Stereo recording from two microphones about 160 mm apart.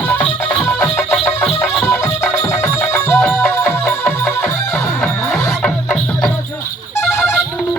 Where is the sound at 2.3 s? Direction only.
20° left (ahead or behind).